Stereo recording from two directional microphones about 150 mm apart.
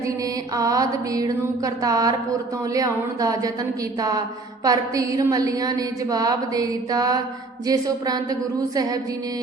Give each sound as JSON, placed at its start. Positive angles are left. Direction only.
{"t": 0.5, "sound": "a woman's voice", "side_deg": -25}
{"t": 4.6, "sound": "a woman's voice", "side_deg": -25}